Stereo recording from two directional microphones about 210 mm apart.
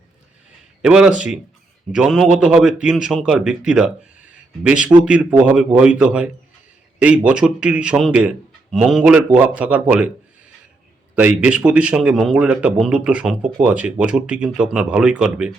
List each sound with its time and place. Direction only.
0.8 s a man's voice: 5° right (ahead or behind)
11.1 s a man's voice: 5° right (ahead or behind)